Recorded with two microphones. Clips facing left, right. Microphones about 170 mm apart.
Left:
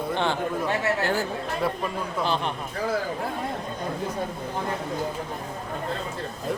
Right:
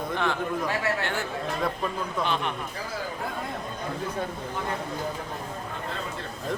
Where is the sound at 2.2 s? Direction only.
35° left (ahead or behind).